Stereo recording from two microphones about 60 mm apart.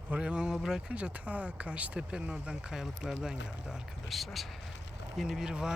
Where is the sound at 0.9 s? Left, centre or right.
Right.